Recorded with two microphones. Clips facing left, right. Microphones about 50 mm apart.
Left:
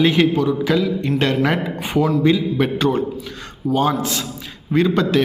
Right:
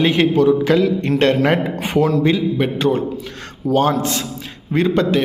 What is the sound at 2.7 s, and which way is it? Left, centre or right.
Speech, right.